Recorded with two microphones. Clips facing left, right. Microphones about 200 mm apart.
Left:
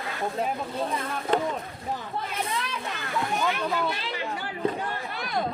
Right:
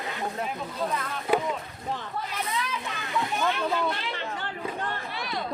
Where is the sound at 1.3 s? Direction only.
10° right (ahead or behind).